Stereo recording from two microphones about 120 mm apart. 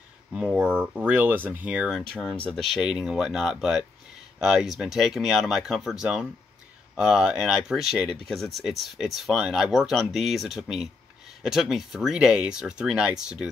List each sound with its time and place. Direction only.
0.3 s speech: 10° right (ahead or behind)
2.0 s speech: 5° left (ahead or behind)